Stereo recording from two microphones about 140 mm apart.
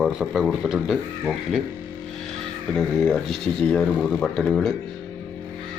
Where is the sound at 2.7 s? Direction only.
5° left (ahead or behind).